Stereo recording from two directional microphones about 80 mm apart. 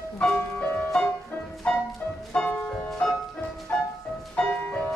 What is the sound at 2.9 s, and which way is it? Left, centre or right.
Music, centre.